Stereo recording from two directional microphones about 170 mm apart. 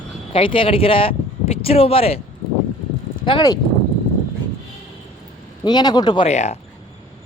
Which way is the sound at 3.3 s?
25° left (ahead or behind).